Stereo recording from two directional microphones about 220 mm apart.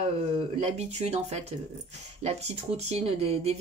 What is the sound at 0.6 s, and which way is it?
Speech, 30° right (ahead or behind).